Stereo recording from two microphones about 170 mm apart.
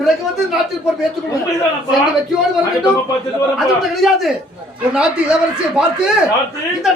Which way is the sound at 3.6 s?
Centre (ahead or behind).